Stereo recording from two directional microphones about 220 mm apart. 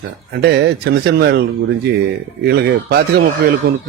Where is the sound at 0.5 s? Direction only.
50° right (ahead or behind).